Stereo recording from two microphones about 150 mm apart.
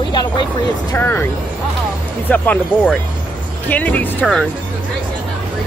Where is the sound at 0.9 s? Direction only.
15° left (ahead or behind).